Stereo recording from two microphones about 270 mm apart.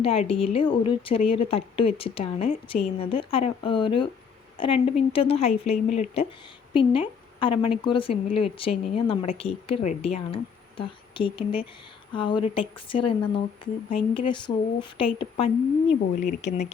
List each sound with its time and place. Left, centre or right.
0.0 s a woman's voice: left